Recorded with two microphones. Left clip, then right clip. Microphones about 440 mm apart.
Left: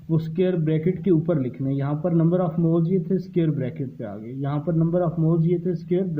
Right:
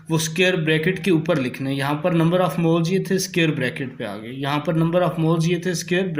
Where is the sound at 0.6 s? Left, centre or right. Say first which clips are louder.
Right 3 dB; left.